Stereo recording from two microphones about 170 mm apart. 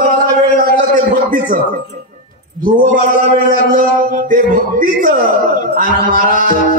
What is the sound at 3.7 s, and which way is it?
A man's voice, 55° right (ahead or behind).